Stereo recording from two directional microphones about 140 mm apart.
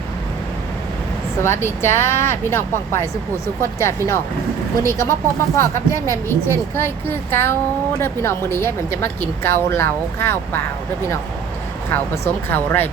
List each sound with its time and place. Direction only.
1.4 s a woman's voice: 15° left (ahead or behind)
12.2 s a woman's voice: 15° left (ahead or behind)